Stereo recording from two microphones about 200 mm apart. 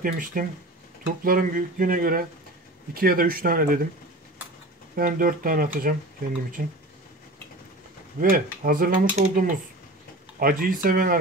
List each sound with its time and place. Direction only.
0.0 s speech: 45° right (ahead or behind)
4.9 s speech: 45° right (ahead or behind)
8.2 s speech: 45° right (ahead or behind)